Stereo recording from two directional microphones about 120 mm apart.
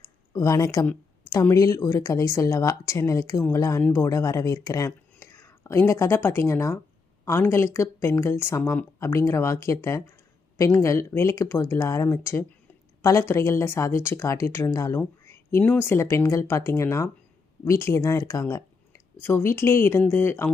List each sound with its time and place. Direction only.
0.3 s speech: 30° left (ahead or behind)